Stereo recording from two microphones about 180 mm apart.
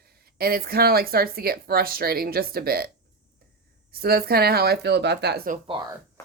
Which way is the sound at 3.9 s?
55° right (ahead or behind).